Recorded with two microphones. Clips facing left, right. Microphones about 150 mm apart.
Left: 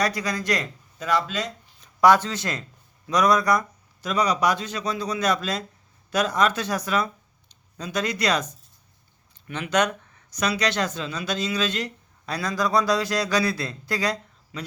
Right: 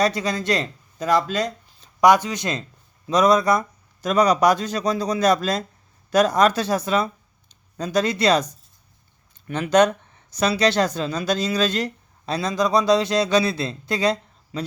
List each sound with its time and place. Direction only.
0.0 s a man's voice: 25° right (ahead or behind)
1.0 s speech: 40° right (ahead or behind)
2.0 s speech: 15° right (ahead or behind)
4.0 s speech: 45° right (ahead or behind); by 7.1 s 25° right (ahead or behind)
7.4 s speech: 40° right (ahead or behind)
9.5 s speech: 35° right (ahead or behind)
12.3 s speech: 25° right (ahead or behind)